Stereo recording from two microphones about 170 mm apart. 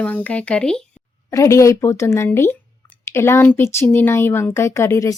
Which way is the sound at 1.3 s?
15° left (ahead or behind).